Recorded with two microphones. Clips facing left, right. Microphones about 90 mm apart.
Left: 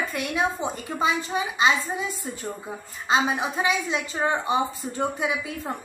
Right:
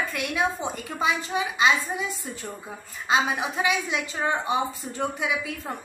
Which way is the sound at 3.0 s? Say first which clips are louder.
Left 1 dB; 5° right (ahead or behind).